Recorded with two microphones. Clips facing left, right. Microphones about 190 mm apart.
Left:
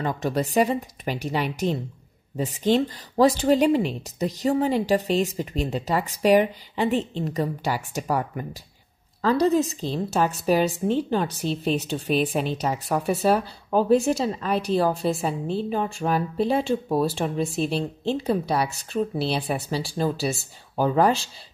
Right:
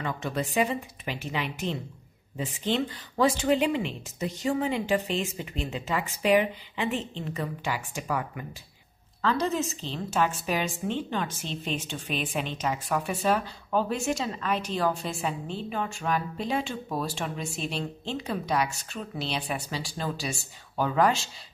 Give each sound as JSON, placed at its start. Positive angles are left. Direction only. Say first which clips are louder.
{"t": 0.0, "sound": "speech", "louder": "left 6 dB", "side_deg": 40}
{"t": 17.5, "sound": "speech", "louder": "left 8 dB", "side_deg": 0}
{"t": 18.1, "sound": "speech", "louder": "left 4 dB", "side_deg": 35}